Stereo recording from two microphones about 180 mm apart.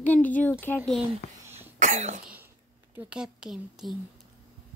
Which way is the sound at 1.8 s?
40° right (ahead or behind).